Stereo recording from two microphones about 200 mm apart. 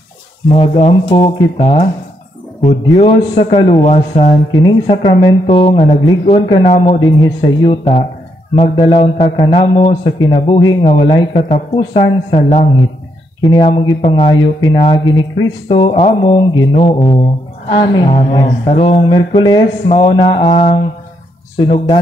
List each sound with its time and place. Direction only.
0.5 s speech: 30° left (ahead or behind)
4.5 s speech: 20° left (ahead or behind)
7.0 s speech: 20° left (ahead or behind)
12.3 s speech: 35° left (ahead or behind)
13.4 s speech: 20° left (ahead or behind)
20.4 s speech: 35° left (ahead or behind)